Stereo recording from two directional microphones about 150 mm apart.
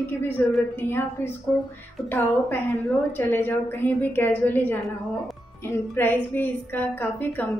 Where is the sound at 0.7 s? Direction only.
15° left (ahead or behind).